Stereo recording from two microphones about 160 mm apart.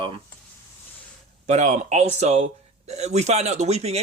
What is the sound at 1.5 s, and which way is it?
Speech, 45° right (ahead or behind).